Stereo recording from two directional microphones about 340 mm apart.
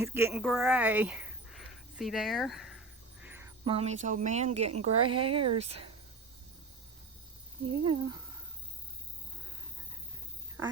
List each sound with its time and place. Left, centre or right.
0.0 s speech: centre
4.7 s speech: right
5.1 s speech: centre
7.9 s speech: centre